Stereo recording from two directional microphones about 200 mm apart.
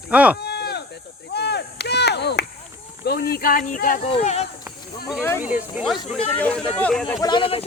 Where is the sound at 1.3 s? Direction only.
55° left (ahead or behind).